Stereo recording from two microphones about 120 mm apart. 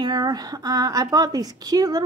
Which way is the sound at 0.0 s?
35° right (ahead or behind).